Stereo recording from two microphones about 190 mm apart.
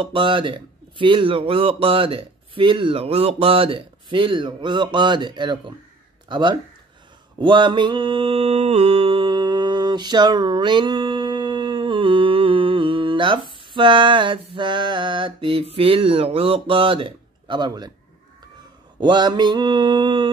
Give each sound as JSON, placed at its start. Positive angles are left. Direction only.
{"t": 0.0, "sound": "a man's voice", "side_deg": -25}
{"t": 7.3, "sound": "mantra", "side_deg": -25}
{"t": 18.9, "sound": "a man's voice", "side_deg": -25}